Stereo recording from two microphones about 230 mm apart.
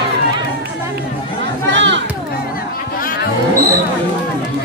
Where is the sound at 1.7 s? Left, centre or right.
Right.